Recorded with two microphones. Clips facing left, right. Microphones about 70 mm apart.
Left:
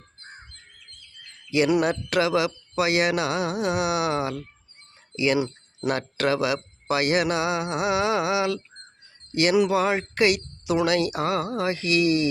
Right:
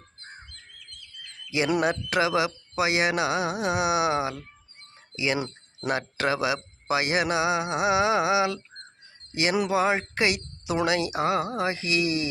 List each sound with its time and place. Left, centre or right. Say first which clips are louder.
1.8 s speech: left 1 dB; centre